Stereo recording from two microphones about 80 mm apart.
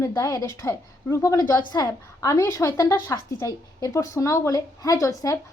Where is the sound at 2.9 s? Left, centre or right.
Left.